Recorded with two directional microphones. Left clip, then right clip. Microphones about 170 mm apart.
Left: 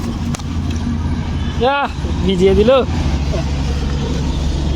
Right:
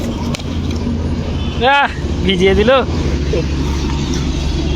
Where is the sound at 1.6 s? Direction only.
15° left (ahead or behind).